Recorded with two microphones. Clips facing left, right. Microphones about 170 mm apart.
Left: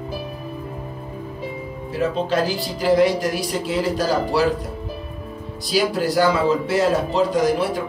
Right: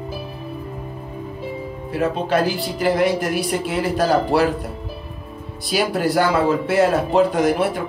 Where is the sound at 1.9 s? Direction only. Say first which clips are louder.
Right 1 dB; 55° right (ahead or behind).